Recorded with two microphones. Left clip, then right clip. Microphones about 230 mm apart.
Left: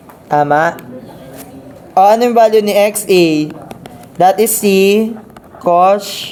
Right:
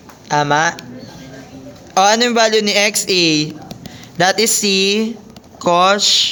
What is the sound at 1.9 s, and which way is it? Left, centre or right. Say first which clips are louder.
Speech: left 4 dB; centre.